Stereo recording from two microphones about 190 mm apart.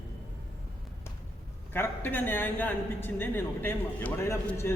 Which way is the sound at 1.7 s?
10° left (ahead or behind).